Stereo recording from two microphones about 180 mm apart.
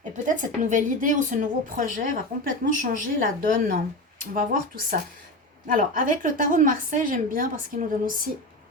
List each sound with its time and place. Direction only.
0.3 s a woman's voice: 45° right (ahead or behind)